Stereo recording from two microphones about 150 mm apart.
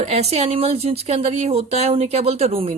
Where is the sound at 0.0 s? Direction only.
45° right (ahead or behind).